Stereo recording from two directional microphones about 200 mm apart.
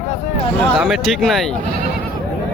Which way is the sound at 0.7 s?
Centre (ahead or behind).